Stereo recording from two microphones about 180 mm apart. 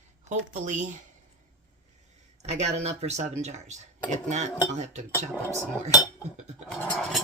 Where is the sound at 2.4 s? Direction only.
40° right (ahead or behind).